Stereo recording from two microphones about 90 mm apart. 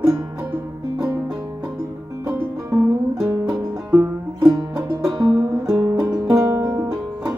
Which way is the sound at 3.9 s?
35° right (ahead or behind).